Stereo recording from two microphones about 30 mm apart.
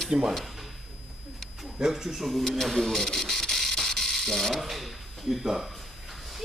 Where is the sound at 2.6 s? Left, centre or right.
Centre.